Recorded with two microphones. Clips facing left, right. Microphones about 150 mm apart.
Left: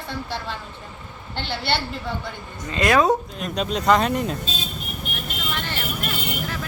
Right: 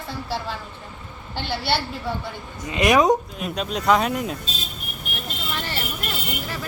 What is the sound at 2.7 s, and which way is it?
Speech, 15° right (ahead or behind).